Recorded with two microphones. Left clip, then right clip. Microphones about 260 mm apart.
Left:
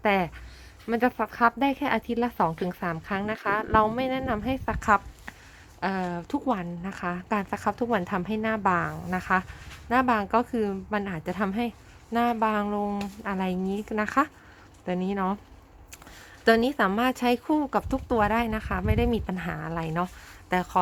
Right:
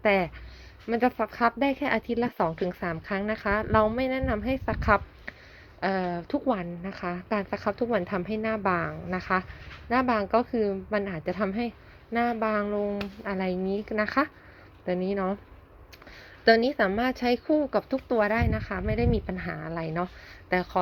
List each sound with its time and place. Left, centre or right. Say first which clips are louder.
0.0 s a woman's voice: right 1 dB; centre
16.4 s a woman's voice: right 1 dB; centre